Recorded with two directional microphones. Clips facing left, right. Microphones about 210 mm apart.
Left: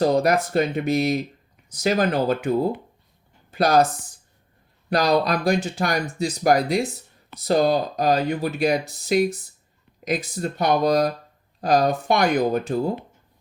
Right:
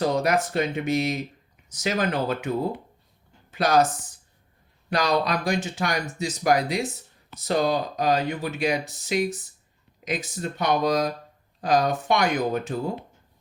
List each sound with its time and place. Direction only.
0.0 s speech: 35° left (ahead or behind)
3.5 s speech: 35° left (ahead or behind)
4.9 s speech: 35° left (ahead or behind)